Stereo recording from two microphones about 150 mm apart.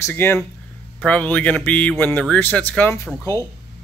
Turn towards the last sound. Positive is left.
turn(degrees=20)  # may be behind; listen again after turning